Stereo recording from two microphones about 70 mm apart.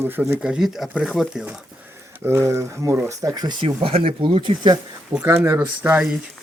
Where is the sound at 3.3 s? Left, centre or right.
Right.